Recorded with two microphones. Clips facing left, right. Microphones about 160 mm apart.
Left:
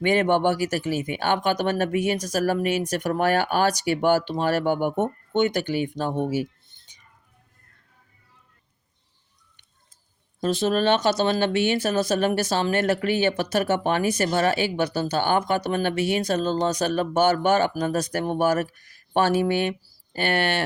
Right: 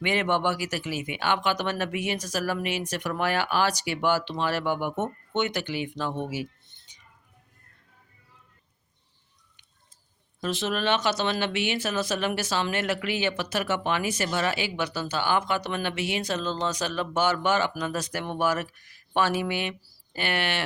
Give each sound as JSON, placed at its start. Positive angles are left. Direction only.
{"t": 0.0, "sound": "speech", "side_deg": 45}
{"t": 4.9, "sound": "speech", "side_deg": 15}
{"t": 5.4, "sound": "speech", "side_deg": 40}
{"t": 10.4, "sound": "speech", "side_deg": 35}